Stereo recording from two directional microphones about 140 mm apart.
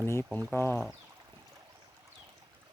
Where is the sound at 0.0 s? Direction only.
20° left (ahead or behind).